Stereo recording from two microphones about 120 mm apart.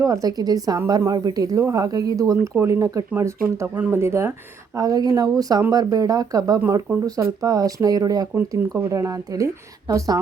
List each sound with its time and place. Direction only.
0.0 s speech: 30° right (ahead or behind)